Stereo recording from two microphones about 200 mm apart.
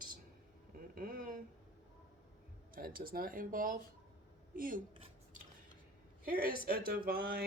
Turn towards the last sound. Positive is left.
turn(degrees=-50)  # may be behind; listen again after turning